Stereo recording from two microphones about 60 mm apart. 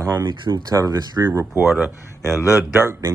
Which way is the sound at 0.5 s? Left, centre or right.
Right.